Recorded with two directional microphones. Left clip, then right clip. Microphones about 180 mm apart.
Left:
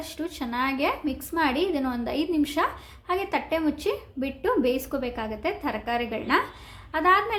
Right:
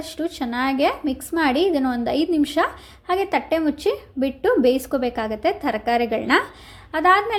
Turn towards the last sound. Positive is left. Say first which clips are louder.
# right 4 dB
turn(degrees=-30)  # may be behind; listen again after turning